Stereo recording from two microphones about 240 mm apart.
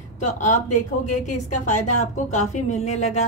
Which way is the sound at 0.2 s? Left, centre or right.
Left.